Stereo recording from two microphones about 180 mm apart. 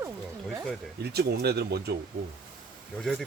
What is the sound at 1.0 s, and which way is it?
Speech, 65° right (ahead or behind).